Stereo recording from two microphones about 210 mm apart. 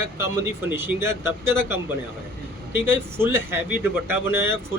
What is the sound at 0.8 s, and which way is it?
A man's voice, 10° right (ahead or behind).